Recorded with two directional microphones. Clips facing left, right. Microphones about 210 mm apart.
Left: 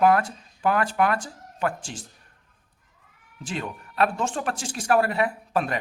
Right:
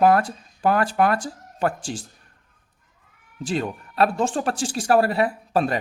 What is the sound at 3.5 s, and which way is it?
Speech, 35° right (ahead or behind).